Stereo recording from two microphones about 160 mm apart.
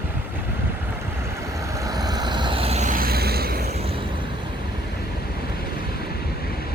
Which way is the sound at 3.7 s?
35° right (ahead or behind).